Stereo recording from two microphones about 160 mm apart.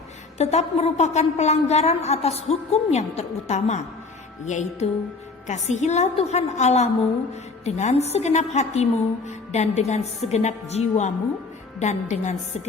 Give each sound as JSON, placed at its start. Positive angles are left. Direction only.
{"t": 0.3, "sound": "a woman's voice", "side_deg": 45}